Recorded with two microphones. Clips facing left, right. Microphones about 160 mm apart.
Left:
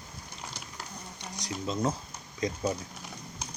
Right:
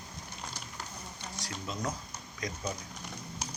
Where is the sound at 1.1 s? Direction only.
20° left (ahead or behind).